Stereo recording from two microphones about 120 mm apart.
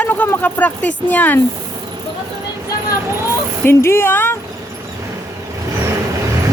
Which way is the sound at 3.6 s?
20° left (ahead or behind).